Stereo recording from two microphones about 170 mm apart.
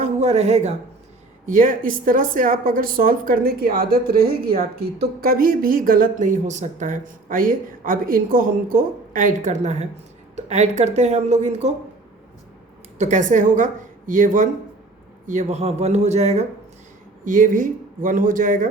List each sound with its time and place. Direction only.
0.0 s a sound: 40° right (ahead or behind)
1.5 s a woman's voice: 50° right (ahead or behind)
13.0 s a woman's voice: 45° right (ahead or behind)
17.2 s speech: 50° right (ahead or behind)